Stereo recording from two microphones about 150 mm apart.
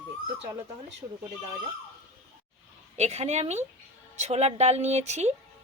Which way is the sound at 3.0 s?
45° right (ahead or behind).